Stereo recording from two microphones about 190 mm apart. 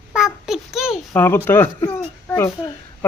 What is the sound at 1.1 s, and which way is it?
A man's voice, 10° left (ahead or behind).